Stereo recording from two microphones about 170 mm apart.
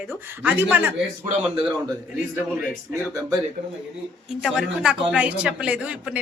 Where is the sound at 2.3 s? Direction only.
5° right (ahead or behind).